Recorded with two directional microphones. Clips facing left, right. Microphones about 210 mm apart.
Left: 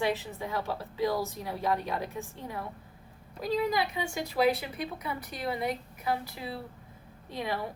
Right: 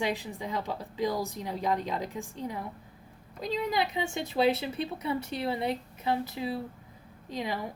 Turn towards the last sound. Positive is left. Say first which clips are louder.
# even
turn(degrees=-15)  # may be behind; listen again after turning